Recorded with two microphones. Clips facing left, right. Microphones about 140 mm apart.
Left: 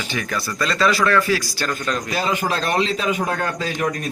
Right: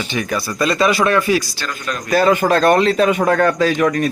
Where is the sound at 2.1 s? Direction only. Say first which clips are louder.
Right 11 dB; 55° right (ahead or behind); by 4.1 s 90° right.